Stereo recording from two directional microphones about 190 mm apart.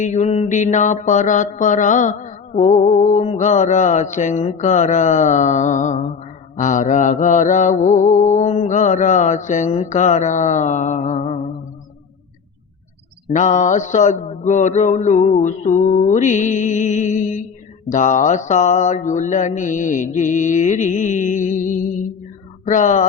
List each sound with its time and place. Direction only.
0.0 s mantra: 40° left (ahead or behind)
13.3 s mantra: 40° left (ahead or behind)